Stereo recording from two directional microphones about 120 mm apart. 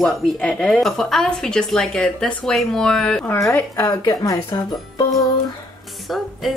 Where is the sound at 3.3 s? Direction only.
25° left (ahead or behind).